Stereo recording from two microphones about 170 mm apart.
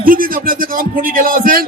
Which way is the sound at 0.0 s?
55° right (ahead or behind).